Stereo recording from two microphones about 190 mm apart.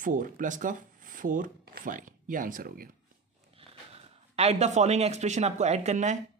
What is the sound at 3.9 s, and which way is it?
Speech, 35° right (ahead or behind).